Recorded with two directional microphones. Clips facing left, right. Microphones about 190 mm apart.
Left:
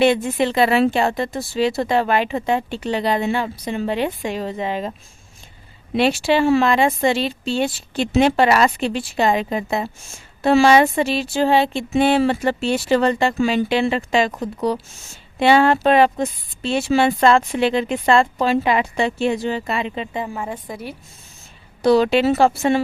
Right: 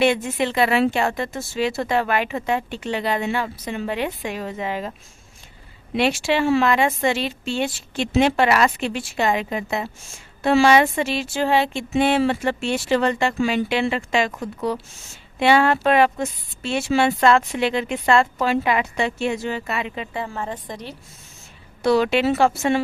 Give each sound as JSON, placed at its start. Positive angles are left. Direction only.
{"t": 0.0, "sound": "a woman's voice", "side_deg": 35}
{"t": 6.0, "sound": "speech", "side_deg": 35}
{"t": 15.4, "sound": "a woman's voice", "side_deg": 30}
{"t": 21.8, "sound": "speech", "side_deg": 35}